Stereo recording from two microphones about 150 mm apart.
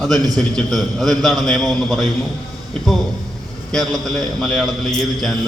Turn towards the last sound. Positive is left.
turn(degrees=0)  # may be behind; listen again after turning